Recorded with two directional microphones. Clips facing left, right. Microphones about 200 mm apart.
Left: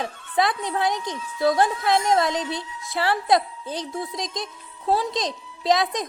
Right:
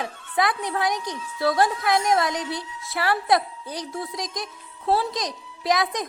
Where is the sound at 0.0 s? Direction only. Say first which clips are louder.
Left 1 dB; 20° left (ahead or behind).